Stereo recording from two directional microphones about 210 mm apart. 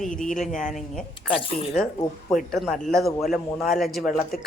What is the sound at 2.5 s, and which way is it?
A man's voice, centre (ahead or behind).